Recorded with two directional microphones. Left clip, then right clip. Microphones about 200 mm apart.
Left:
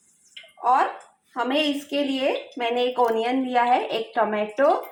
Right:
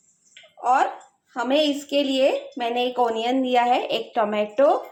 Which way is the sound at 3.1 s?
Centre (ahead or behind).